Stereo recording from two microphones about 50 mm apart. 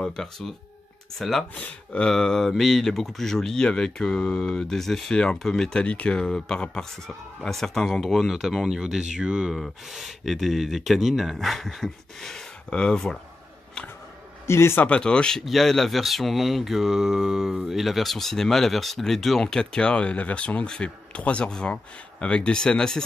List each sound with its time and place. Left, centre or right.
0.0 s speech: centre
1.5 s speech: left
2.0 s speech: centre
5.1 s speech: centre
5.9 s speech: left
6.1 s speech: centre
9.5 s speech: centre
14.4 s a man's voice: left
14.9 s speech: centre
15.4 s speech: centre